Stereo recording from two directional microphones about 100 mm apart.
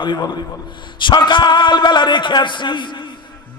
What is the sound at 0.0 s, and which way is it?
A man's voice, 50° left (ahead or behind).